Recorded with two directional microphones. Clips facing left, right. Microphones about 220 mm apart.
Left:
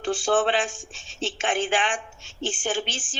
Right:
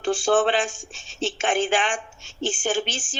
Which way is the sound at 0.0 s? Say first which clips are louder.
Right 2 dB; 45° right (ahead or behind).